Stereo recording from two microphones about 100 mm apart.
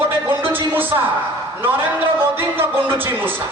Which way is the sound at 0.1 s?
20° right (ahead or behind).